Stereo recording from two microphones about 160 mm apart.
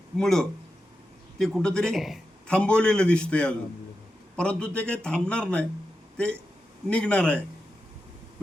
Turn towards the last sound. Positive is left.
turn(degrees=5)  # may be behind; listen again after turning